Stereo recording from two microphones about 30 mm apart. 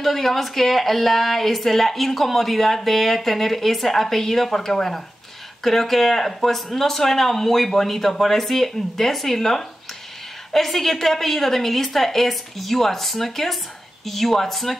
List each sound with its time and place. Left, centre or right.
0.0 s speech: centre